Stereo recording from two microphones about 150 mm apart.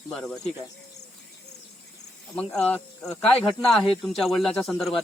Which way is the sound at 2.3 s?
5° left (ahead or behind).